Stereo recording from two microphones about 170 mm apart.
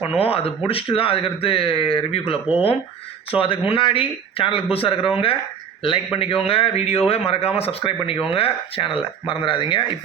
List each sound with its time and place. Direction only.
0.2 s speech: 35° left (ahead or behind)